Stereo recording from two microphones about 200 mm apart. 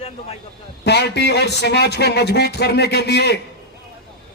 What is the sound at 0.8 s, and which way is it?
Speech, 55° left (ahead or behind).